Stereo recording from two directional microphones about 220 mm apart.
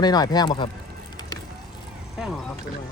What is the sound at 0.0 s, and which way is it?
Speech, 20° left (ahead or behind).